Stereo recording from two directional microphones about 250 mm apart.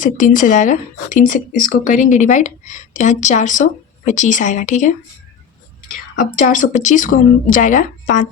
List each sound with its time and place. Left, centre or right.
0.0 s speech: left
6.1 s speech: left